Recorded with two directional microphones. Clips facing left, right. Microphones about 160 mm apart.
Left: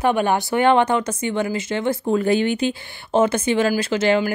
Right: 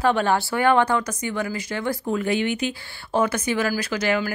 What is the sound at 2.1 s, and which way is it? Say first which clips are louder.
A woman's voice: left 5 dB; 35° left (ahead or behind).